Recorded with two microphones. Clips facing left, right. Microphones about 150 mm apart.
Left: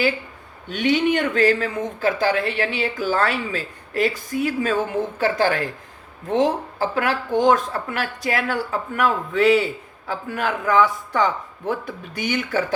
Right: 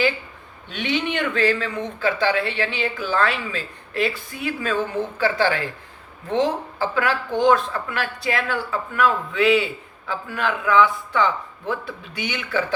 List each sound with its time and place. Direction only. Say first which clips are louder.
0.7 s speech: left 5 dB; 45° left (ahead or behind)